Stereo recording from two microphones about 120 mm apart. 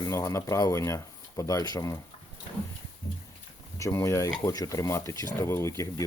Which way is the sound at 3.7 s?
25° left (ahead or behind).